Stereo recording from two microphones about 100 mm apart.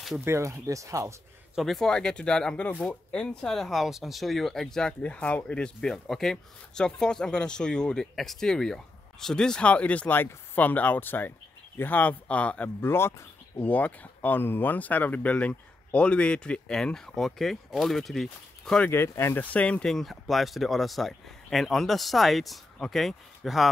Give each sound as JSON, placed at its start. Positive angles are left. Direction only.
{"t": 0.2, "sound": "speech", "side_deg": -30}
{"t": 1.5, "sound": "speech", "side_deg": 0}
{"t": 18.9, "sound": "speech", "side_deg": 25}